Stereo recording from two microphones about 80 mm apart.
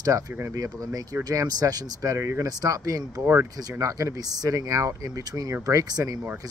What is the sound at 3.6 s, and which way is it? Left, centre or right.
Speech, right.